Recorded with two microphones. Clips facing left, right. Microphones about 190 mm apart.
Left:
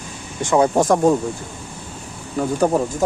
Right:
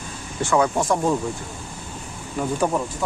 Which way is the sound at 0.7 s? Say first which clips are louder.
Left 6 dB; 40° left (ahead or behind).